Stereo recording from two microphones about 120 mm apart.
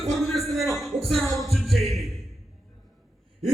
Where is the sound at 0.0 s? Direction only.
Centre (ahead or behind).